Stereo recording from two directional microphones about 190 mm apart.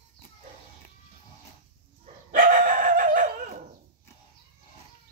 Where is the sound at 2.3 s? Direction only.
45° right (ahead or behind).